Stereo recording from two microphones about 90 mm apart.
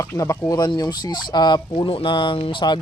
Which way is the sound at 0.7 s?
50° left (ahead or behind).